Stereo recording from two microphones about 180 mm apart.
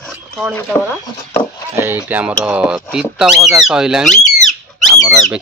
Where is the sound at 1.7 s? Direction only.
10° right (ahead or behind).